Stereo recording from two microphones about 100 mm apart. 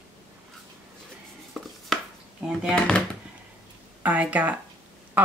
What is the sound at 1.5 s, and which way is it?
Chopping, centre (ahead or behind).